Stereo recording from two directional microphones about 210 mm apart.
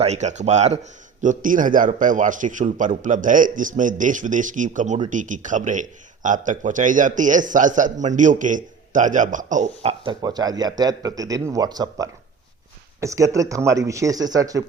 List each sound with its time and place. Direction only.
0.0 s speech: 35° right (ahead or behind)
10.0 s speech: 20° right (ahead or behind)